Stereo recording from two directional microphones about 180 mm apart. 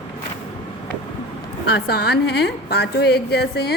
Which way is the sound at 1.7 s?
65° left (ahead or behind).